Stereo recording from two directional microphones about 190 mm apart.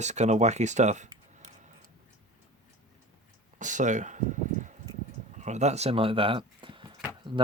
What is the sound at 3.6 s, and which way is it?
Speech, 40° right (ahead or behind).